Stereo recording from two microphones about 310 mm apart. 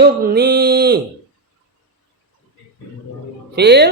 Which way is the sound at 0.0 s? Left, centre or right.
Right.